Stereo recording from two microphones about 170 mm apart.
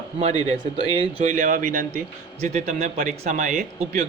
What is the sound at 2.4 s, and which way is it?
Speech, 40° right (ahead or behind).